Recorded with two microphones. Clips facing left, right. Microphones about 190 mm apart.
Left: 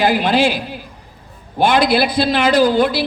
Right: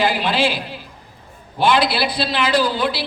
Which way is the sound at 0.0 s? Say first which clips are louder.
Left 4 dB; 45° left (ahead or behind).